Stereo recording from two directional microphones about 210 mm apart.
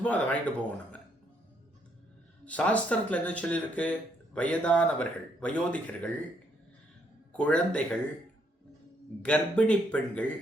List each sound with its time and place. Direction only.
0.0 s speech: 5° left (ahead or behind)
2.4 s speech: 5° left (ahead or behind)
7.3 s speech: 5° left (ahead or behind)
9.2 s speech: 5° left (ahead or behind)